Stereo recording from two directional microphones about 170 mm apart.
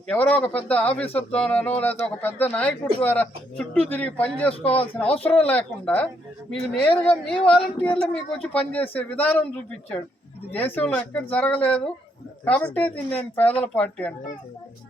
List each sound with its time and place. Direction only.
0.1 s speech: 10° left (ahead or behind)